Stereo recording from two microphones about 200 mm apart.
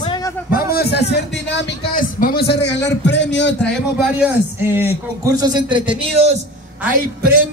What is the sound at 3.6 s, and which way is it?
A man's voice, 5° right (ahead or behind).